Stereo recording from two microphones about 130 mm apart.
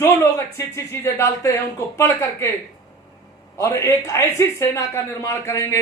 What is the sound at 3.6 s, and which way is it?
Speech, 25° left (ahead or behind).